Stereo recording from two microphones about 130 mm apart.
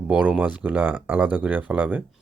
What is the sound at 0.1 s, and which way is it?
Speech, 10° right (ahead or behind).